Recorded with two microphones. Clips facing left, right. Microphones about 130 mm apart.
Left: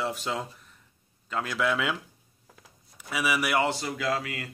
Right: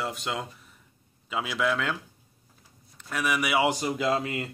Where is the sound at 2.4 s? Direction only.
90° left.